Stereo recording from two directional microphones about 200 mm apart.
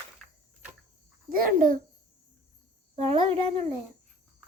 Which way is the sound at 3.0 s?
30° right (ahead or behind).